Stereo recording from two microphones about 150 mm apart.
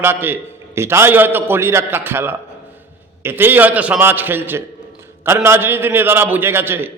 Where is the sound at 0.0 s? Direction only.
15° right (ahead or behind).